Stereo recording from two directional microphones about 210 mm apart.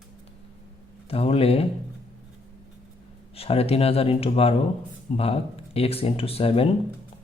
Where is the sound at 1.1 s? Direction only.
30° left (ahead or behind).